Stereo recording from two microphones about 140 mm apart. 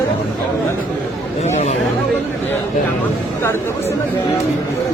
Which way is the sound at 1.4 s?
55° left (ahead or behind).